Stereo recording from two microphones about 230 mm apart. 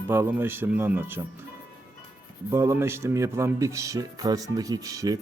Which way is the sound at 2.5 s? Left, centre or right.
Centre.